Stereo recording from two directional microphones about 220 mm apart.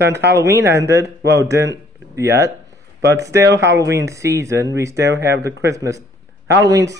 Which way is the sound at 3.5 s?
55° right (ahead or behind).